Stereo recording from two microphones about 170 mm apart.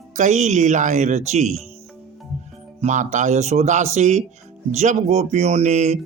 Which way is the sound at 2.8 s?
45° right (ahead or behind).